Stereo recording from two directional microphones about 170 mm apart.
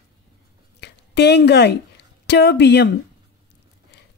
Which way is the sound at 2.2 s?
85° left.